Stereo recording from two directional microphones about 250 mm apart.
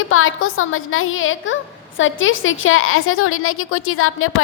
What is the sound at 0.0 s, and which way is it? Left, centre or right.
A woman's voice, left.